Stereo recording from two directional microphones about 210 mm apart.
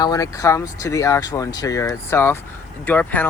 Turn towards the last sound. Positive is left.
turn(degrees=10)  # may be behind; listen again after turning